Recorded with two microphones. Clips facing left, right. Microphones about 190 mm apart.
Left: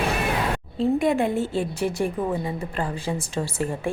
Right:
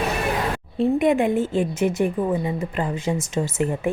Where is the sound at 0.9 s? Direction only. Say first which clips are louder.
Right 4 dB; 20° right (ahead or behind).